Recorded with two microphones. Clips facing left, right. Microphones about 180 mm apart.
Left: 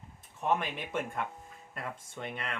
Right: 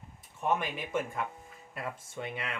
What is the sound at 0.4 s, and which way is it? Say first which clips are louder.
Speech: even; 5° right (ahead or behind).